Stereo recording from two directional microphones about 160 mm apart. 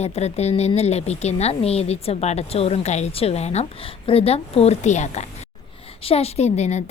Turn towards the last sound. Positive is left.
turn(degrees=45)  # may be behind; listen again after turning